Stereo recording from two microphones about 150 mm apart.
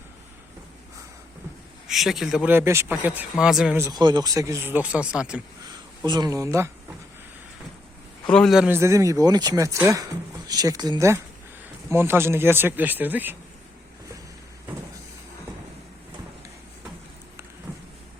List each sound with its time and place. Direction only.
1.9 s speech: centre (ahead or behind)
2.5 s speech: 15° right (ahead or behind)
3.8 s speech: 25° right (ahead or behind); by 5.4 s 5° right (ahead or behind)
6.1 s speech: 25° right (ahead or behind)
8.3 s speech: 5° left (ahead or behind)
8.7 s speech: 20° right (ahead or behind)